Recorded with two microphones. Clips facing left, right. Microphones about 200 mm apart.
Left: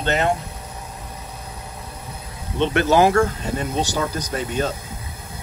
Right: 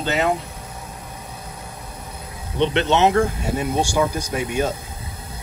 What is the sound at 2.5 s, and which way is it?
Speech, 15° right (ahead or behind).